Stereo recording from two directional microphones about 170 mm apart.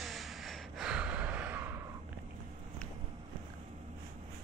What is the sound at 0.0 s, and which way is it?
Gasp, centre (ahead or behind).